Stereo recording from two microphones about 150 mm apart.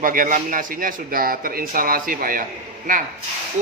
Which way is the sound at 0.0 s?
65° right (ahead or behind).